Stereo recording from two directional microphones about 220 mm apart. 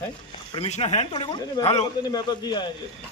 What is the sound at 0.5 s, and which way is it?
Speech, 25° left (ahead or behind).